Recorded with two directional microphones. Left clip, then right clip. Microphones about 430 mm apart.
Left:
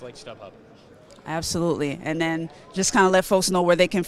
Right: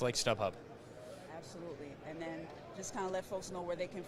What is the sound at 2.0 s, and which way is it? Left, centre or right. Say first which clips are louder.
Speech: left 16 dB; left.